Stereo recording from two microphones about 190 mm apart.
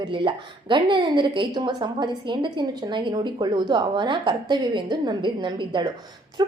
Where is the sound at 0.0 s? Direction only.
25° right (ahead or behind).